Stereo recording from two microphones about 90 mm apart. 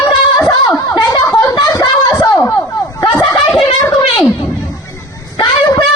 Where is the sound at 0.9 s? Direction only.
40° left (ahead or behind).